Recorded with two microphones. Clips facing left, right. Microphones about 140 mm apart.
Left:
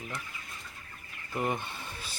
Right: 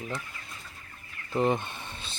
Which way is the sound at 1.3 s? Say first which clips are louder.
Right 6 dB; 25° right (ahead or behind).